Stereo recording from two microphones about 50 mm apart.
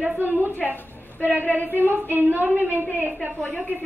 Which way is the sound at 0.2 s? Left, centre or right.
Right.